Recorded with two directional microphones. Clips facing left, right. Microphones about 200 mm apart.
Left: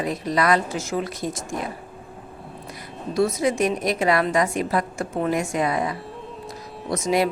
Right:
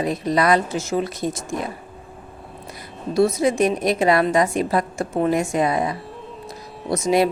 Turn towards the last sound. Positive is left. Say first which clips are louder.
# right 3 dB
turn(degrees=-25)  # may be behind; listen again after turning